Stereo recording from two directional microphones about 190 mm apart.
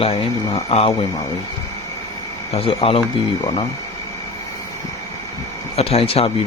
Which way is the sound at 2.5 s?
30° left (ahead or behind).